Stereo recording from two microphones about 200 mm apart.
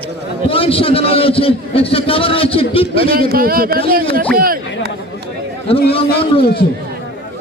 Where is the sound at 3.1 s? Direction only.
45° right (ahead or behind).